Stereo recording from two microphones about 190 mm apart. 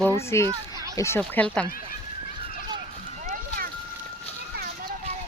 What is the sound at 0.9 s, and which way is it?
Speech, 15° left (ahead or behind).